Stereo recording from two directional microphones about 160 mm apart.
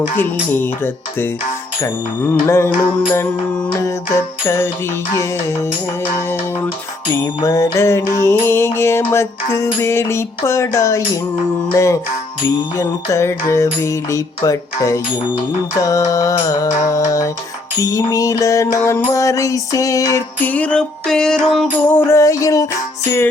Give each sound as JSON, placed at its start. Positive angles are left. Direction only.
{"t": 0.5, "sound": "mantra", "side_deg": 15}
{"t": 7.1, "sound": "mantra", "side_deg": 20}
{"t": 11.7, "sound": "music", "side_deg": 20}
{"t": 23.0, "sound": "mantra", "side_deg": 15}